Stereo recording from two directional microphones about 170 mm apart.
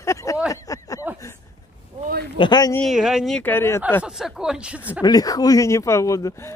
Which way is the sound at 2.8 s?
5° right (ahead or behind).